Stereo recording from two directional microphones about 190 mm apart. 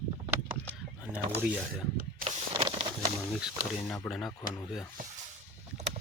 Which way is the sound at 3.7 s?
5° left (ahead or behind).